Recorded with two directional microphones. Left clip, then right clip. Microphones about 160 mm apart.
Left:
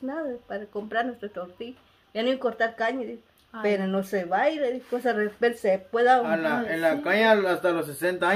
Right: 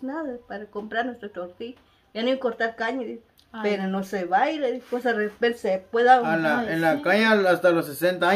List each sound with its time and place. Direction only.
0.0 s speech: 45° left (ahead or behind)
6.2 s a man's voice: 90° right